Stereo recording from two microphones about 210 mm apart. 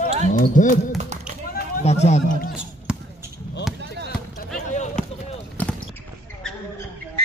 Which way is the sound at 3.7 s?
55° right (ahead or behind).